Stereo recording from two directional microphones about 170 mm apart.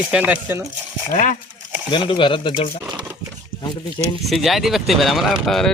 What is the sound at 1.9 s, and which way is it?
Speech, 30° left (ahead or behind).